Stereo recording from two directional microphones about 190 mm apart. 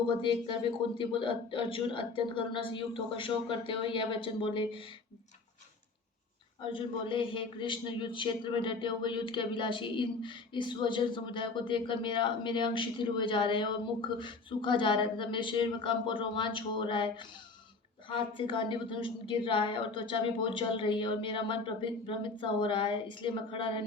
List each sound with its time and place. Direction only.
0.2 s a man's voice: 25° left (ahead or behind)
6.6 s a man's voice: 25° left (ahead or behind)
18.3 s a man's voice: 25° left (ahead or behind)